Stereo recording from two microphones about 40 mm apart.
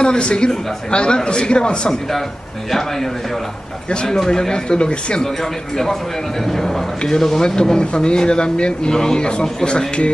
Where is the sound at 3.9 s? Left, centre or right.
Left.